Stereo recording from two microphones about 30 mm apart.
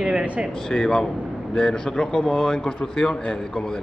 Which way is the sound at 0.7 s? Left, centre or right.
Centre.